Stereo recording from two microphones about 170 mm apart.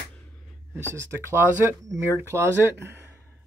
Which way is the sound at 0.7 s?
15° right (ahead or behind).